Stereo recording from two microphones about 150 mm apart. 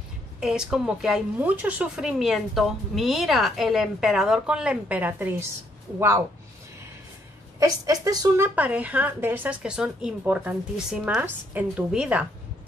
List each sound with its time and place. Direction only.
0.4 s speech: 5° right (ahead or behind)
7.5 s a woman's voice: 25° right (ahead or behind)
8.5 s speech: 10° right (ahead or behind)